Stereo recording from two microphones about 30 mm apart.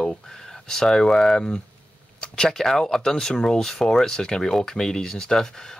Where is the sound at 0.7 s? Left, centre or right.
Centre.